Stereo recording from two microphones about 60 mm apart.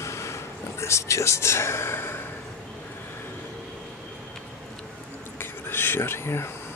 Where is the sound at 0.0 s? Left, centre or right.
Left.